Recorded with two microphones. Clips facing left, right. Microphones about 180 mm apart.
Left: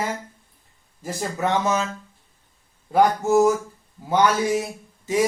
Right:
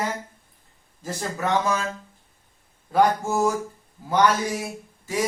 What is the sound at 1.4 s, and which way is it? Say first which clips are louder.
Speech: left 2 dB; 20° left (ahead or behind).